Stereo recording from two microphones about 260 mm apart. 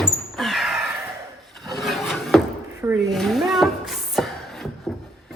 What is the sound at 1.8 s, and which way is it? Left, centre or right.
Filing, centre.